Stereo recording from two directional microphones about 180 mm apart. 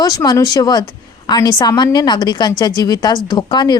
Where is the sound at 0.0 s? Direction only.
20° left (ahead or behind).